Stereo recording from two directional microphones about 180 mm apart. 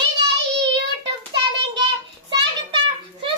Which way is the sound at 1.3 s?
25° right (ahead or behind).